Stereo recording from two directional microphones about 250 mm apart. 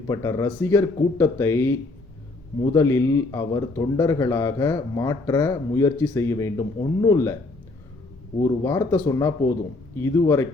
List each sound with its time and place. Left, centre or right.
0.1 s a man's voice: centre
8.6 s a man's voice: centre